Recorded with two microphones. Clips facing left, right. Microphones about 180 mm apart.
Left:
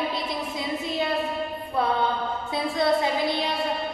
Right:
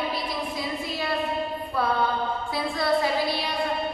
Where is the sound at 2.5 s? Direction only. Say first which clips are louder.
Left 2 dB; 20° left (ahead or behind).